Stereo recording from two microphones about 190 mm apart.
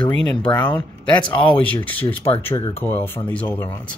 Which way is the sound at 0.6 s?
10° left (ahead or behind).